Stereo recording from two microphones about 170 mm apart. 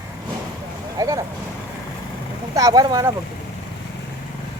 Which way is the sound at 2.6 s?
20° right (ahead or behind).